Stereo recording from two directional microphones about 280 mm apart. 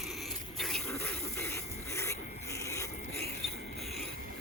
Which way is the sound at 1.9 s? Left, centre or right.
Centre.